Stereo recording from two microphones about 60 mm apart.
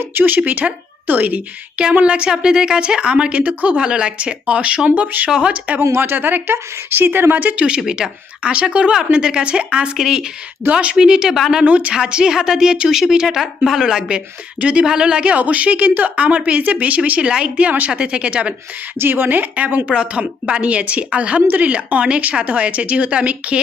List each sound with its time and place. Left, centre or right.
0.1 s speech: right
1.8 s speech: centre
6.0 s speech: right
7.8 s speech: centre
10.7 s speech: right
11.3 s speech: centre
11.6 s speech: right
18.9 s speech: right
19.9 s speech: centre
21.4 s speech: right